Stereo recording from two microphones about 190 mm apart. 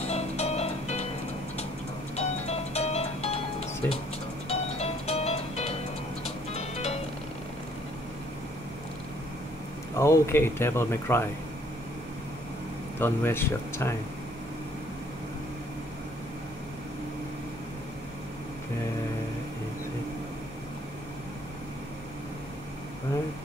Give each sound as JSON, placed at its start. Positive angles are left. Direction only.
{"t": 0.0, "sound": "music", "side_deg": 35}
{"t": 2.1, "sound": "music", "side_deg": 35}
{"t": 9.9, "sound": "speech", "side_deg": 15}
{"t": 13.0, "sound": "speech", "side_deg": 10}